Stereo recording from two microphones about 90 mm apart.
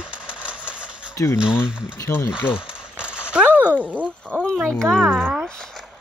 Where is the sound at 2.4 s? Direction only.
10° right (ahead or behind).